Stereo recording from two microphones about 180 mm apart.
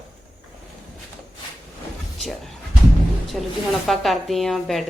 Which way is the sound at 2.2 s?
Centre (ahead or behind).